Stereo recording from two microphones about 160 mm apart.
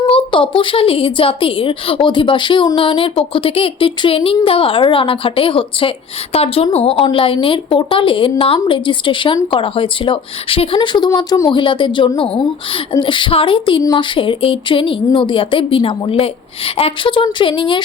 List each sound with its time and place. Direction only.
0.1 s a woman's voice: 35° left (ahead or behind)